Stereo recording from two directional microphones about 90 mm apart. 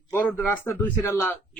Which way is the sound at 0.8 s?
30° left (ahead or behind).